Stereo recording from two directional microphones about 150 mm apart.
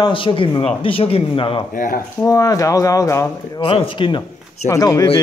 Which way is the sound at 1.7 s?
65° left (ahead or behind).